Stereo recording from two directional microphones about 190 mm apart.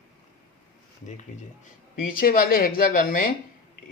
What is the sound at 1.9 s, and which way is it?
Speech, 50° left (ahead or behind).